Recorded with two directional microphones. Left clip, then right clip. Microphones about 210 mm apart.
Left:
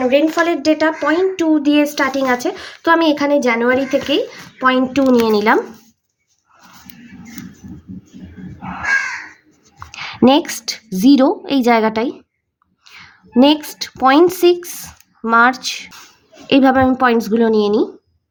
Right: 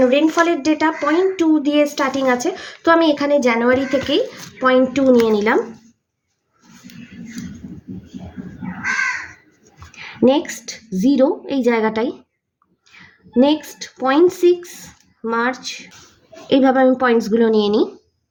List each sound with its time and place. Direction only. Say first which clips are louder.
0.3 s speech: left 1 dB; 20° left (ahead or behind)
10.0 s a woman's voice: left 3 dB; 40° left (ahead or behind); by 17.8 s 20° left (ahead or behind)